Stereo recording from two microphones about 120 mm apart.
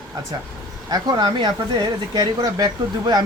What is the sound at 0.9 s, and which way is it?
Speech, 40° right (ahead or behind).